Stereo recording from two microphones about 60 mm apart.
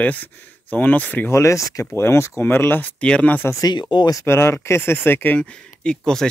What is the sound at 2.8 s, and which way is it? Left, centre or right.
Speech, left.